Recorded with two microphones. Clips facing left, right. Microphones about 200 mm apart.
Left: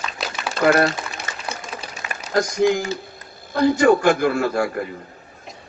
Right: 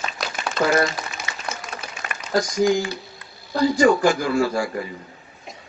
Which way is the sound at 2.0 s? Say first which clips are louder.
Right 1 dB; 45° right (ahead or behind).